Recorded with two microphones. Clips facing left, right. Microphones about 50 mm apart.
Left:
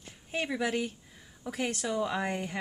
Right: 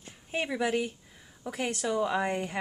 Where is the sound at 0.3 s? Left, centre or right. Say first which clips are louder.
Right 2 dB; centre.